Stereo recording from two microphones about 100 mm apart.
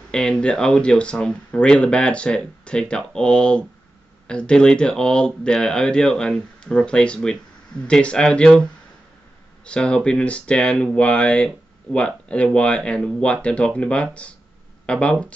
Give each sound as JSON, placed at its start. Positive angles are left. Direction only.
{"t": 0.1, "sound": "speech", "side_deg": 10}
{"t": 9.7, "sound": "speech", "side_deg": 10}